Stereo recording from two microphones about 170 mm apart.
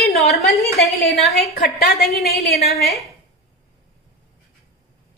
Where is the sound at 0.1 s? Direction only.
Centre (ahead or behind).